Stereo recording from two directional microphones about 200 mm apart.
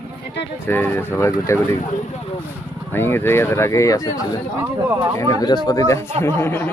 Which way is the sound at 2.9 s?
10° left (ahead or behind).